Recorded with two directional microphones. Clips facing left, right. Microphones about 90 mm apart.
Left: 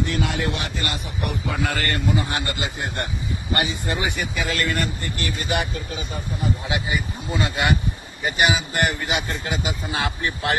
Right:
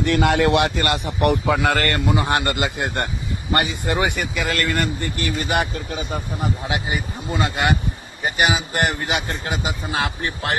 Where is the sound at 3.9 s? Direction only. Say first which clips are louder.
Right 4 dB; 65° right (ahead or behind).